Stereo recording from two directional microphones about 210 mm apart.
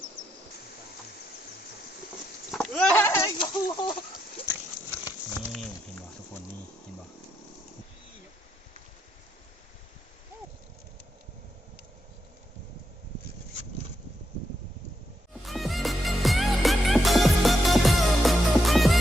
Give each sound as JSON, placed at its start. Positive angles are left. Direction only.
{"t": 2.5, "sound": "goat", "side_deg": 5}
{"t": 3.3, "sound": "chicken", "side_deg": 20}
{"t": 5.4, "sound": "a sound", "side_deg": 0}
{"t": 15.4, "sound": "music", "side_deg": 0}